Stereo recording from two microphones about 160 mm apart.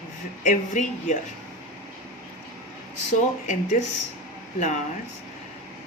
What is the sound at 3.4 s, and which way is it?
Speech, 50° left (ahead or behind).